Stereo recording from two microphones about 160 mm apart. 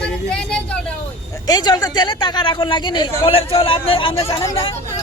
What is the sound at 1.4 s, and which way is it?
Speech, 25° left (ahead or behind).